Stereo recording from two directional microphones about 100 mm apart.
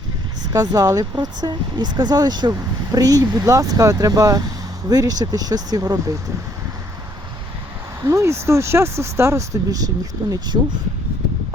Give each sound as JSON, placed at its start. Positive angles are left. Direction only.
{"t": 0.5, "sound": "speech", "side_deg": -40}
{"t": 8.0, "sound": "speech", "side_deg": -30}